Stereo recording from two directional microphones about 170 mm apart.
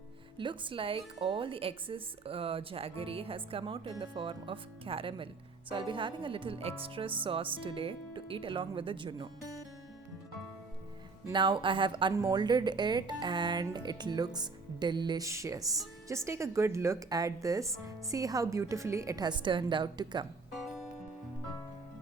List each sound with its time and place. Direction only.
0.3 s a woman's voice: 30° right (ahead or behind)
11.3 s speech: 30° right (ahead or behind)
20.6 s music: centre (ahead or behind)